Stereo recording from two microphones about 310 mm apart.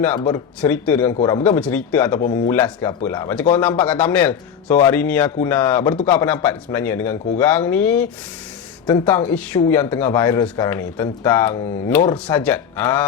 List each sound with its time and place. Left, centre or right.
0.0 s a man's voice: centre